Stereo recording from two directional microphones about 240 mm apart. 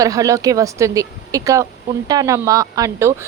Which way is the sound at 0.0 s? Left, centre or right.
Centre.